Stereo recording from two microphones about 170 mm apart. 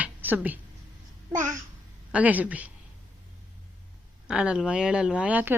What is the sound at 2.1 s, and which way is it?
Speech, 10° right (ahead or behind).